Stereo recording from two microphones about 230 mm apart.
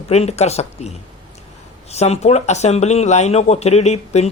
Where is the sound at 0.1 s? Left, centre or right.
Left.